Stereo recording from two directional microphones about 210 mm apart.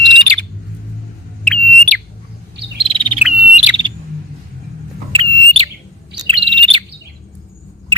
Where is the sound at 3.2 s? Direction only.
5° right (ahead or behind).